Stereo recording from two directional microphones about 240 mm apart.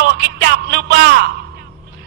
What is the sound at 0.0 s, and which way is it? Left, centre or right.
Music, right.